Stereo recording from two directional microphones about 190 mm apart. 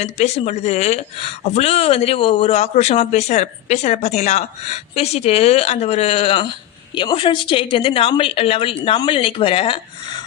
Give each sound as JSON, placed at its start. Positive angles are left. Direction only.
{"t": 0.0, "sound": "speech", "side_deg": 35}